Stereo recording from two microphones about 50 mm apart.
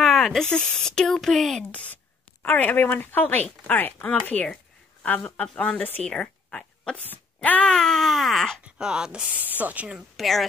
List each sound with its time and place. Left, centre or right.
0.0 s a sound: centre
0.5 s speech: centre
1.0 s baby cry: centre
2.4 s a woman's voice: left; by 7.0 s centre
7.4 s speech: left
7.7 s baby cry: centre
8.7 s ratchet: centre
9.6 s speech: right
10.1 s a woman's voice: centre